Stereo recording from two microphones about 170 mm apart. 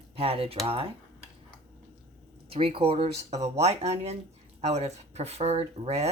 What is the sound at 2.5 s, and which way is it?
Speech, 30° right (ahead or behind).